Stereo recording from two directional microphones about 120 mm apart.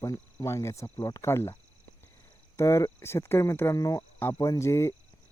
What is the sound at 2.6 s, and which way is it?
Speech, 25° left (ahead or behind).